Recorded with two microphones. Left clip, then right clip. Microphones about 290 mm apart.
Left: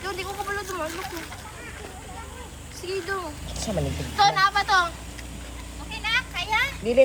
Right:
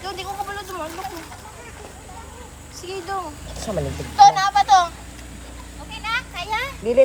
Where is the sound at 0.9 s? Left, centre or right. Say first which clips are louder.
Right 1 dB; right.